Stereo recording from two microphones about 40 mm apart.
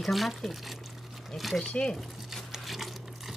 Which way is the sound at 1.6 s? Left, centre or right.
Left.